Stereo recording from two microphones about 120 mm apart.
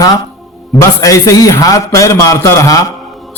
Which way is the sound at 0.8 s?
25° left (ahead or behind).